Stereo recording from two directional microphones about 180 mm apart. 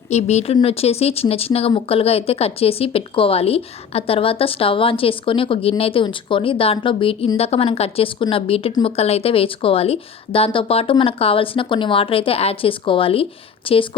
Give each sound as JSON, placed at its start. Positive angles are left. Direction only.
{"t": 0.1, "sound": "a woman's voice", "side_deg": 40}